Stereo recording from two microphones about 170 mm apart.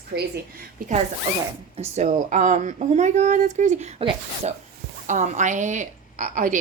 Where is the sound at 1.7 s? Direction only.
40° right (ahead or behind).